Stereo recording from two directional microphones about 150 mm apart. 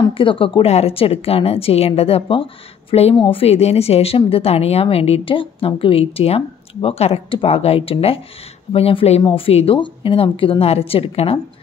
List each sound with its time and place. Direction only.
0.2 s a woman's voice: 35° left (ahead or behind)